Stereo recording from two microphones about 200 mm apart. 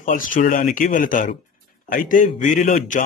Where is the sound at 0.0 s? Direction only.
40° left (ahead or behind).